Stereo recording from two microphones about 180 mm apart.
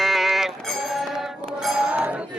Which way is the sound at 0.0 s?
Centre (ahead or behind).